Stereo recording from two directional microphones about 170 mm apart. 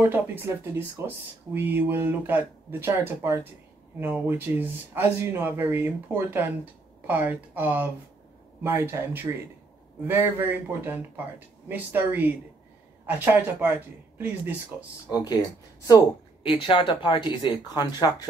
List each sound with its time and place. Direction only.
0.0 s speech: 10° right (ahead or behind)
16.4 s speech: 30° left (ahead or behind)